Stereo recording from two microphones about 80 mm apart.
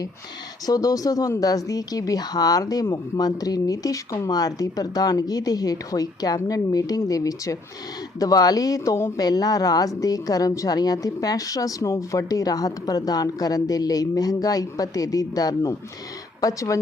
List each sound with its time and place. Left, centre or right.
0.6 s a woman's voice: left
9.1 s a woman's voice: left